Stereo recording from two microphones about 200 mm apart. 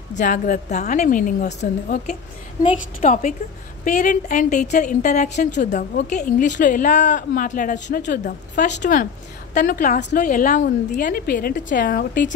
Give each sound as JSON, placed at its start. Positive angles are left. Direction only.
{"t": 0.1, "sound": "a woman's voice", "side_deg": 40}